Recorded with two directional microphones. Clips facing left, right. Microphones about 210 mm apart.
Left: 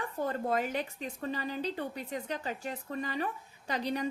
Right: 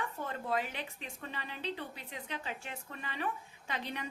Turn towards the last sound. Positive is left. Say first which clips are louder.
# left 8 dB
turn(degrees=40)  # may be behind; listen again after turning